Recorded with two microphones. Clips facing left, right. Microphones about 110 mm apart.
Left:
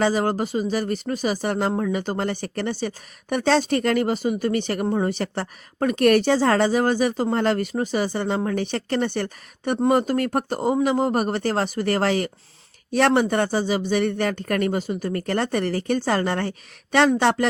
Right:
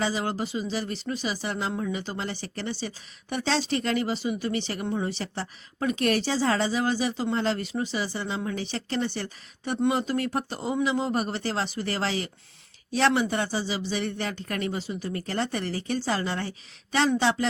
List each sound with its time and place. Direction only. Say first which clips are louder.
0.0 s speech: left 7 dB; 50° left (ahead or behind)